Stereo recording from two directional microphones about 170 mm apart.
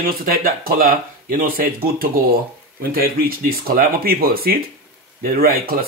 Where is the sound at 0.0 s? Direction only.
60° right (ahead or behind).